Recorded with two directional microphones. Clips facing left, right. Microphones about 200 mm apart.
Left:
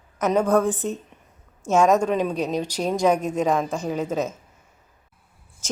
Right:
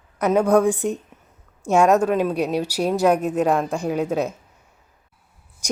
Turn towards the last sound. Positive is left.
turn(degrees=-15)  # may be behind; listen again after turning